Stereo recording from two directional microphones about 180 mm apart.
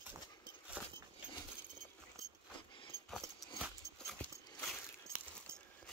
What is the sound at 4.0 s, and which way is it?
Horse, 5° left (ahead or behind).